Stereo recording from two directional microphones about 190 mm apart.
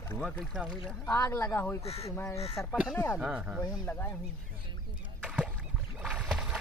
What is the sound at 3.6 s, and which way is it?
Speech, 10° left (ahead or behind).